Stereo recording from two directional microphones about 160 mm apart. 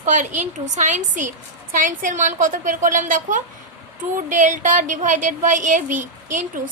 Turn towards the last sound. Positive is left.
turn(degrees=-55)  # may be behind; listen again after turning